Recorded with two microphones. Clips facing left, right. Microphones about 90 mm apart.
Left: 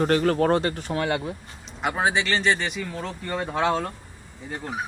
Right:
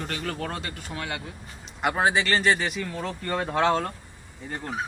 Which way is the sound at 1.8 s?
Centre (ahead or behind).